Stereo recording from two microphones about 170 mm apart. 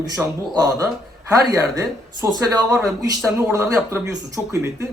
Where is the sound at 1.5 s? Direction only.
20° right (ahead or behind).